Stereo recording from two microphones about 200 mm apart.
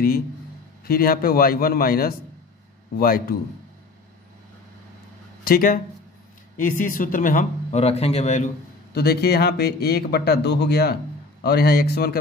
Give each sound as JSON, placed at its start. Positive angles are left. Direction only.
{"t": 0.8, "sound": "speech", "side_deg": 45}
{"t": 5.4, "sound": "speech", "side_deg": 45}
{"t": 8.9, "sound": "speech", "side_deg": 55}